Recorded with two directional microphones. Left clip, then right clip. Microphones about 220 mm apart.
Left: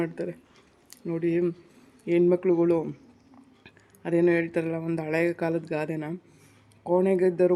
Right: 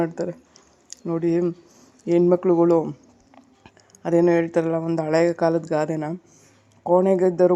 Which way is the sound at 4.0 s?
15° right (ahead or behind).